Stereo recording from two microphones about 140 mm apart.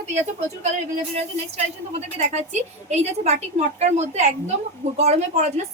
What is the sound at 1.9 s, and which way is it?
A woman's voice, 55° right (ahead or behind).